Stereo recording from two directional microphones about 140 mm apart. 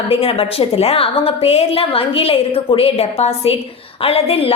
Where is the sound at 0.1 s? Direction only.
45° left (ahead or behind).